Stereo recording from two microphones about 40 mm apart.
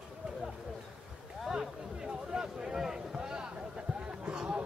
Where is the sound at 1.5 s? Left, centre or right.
Centre.